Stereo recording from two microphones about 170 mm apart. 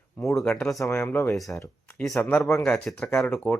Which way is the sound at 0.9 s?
15° left (ahead or behind).